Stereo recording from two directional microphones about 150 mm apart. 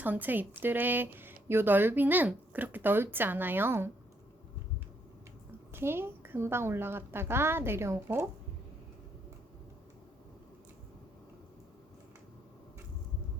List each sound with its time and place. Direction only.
0.0 s speech: 10° right (ahead or behind)
5.7 s speech: 15° right (ahead or behind)